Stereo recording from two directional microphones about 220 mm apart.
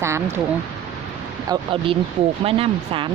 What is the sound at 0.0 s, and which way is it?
Speech, 10° right (ahead or behind).